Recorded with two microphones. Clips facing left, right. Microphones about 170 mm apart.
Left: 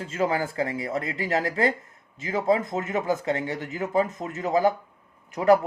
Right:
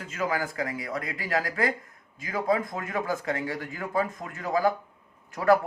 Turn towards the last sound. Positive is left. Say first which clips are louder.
# left 3 dB
turn(degrees=20)  # may be behind; listen again after turning